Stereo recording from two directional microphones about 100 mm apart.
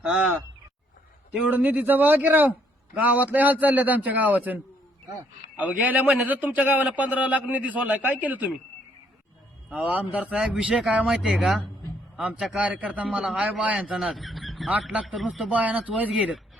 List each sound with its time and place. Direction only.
0.0 s a man's voice: 10° right (ahead or behind)
9.6 s a man's voice: 15° right (ahead or behind)
13.9 s a man's voice: centre (ahead or behind)
15.4 s a man's voice: 15° right (ahead or behind)